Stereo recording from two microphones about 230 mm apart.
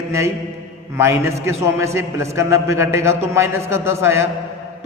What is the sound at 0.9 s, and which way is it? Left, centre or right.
A man's voice, centre.